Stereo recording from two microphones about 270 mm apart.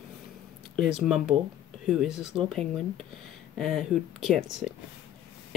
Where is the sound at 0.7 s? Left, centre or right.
Centre.